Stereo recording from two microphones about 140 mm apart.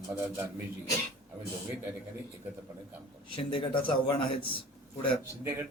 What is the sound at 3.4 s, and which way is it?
A man's voice, 40° left (ahead or behind).